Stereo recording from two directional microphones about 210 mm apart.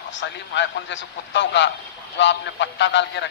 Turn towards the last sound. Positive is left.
turn(degrees=55)  # may be behind; listen again after turning